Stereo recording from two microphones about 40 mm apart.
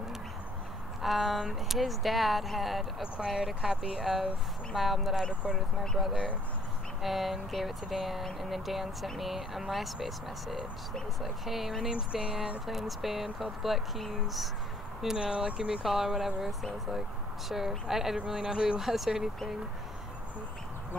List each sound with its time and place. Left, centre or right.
1.0 s speech: centre
11.9 s speech: right
12.6 s speech: centre
15.1 s speech: right
15.8 s speech: centre
17.5 s speech: centre
18.8 s speech: centre